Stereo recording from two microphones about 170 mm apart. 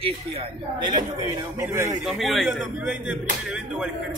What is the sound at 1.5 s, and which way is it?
Speech, 15° right (ahead or behind).